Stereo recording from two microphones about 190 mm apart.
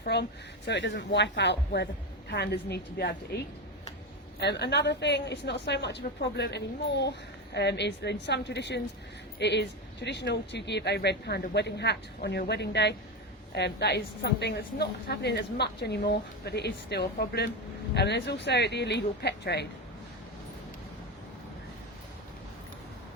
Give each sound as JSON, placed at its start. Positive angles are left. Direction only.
{"t": 0.0, "sound": "a woman's voice", "side_deg": 60}
{"t": 4.4, "sound": "a woman's voice", "side_deg": 60}